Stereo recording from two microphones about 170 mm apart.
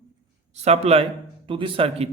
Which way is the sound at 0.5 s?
40° right (ahead or behind).